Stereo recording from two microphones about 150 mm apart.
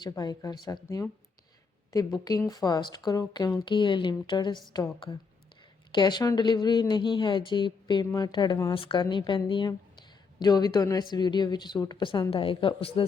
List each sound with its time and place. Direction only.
0.2 s speech: 25° left (ahead or behind)
2.1 s speech: 25° left (ahead or behind)